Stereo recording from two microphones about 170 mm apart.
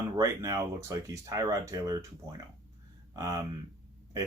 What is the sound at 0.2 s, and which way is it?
Speech, 20° right (ahead or behind).